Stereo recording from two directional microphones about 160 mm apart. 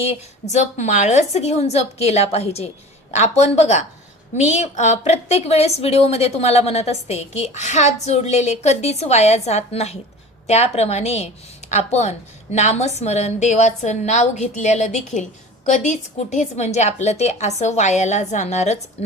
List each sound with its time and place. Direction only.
0.0 s a woman's voice: 45° left (ahead or behind)